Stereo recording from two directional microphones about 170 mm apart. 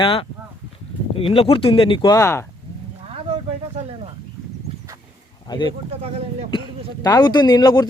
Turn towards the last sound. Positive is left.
turn(degrees=25)  # may be behind; listen again after turning